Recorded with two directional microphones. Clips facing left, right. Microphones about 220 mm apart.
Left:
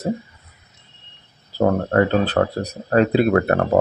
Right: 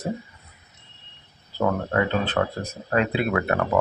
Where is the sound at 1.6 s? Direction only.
40° left (ahead or behind).